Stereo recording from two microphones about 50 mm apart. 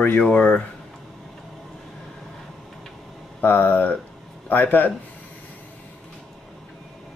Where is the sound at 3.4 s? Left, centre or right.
Left.